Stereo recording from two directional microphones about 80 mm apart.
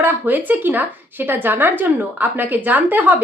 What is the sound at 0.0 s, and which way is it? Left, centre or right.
A woman's voice, right.